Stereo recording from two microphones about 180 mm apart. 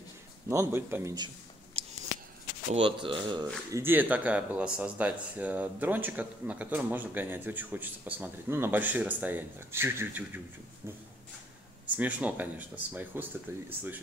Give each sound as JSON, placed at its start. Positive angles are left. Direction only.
{"t": 0.5, "sound": "speech", "side_deg": -15}
{"t": 1.8, "sound": "a sound", "side_deg": -35}
{"t": 2.7, "sound": "speech", "side_deg": -30}
{"t": 3.7, "sound": "speech", "side_deg": -10}
{"t": 12.0, "sound": "speech", "side_deg": -10}